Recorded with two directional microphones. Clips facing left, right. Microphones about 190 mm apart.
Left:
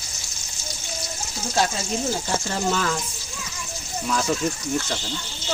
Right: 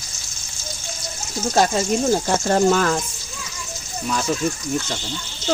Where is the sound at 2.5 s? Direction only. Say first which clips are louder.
Right 9 dB; 55° right (ahead or behind).